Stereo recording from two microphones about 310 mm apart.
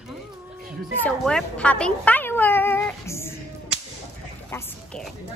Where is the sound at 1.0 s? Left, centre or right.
Centre.